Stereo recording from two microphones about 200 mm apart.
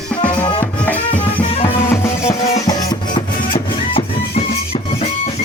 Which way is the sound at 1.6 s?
10° left (ahead or behind).